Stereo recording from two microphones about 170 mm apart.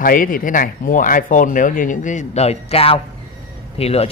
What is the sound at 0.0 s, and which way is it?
A man's voice, 55° left (ahead or behind).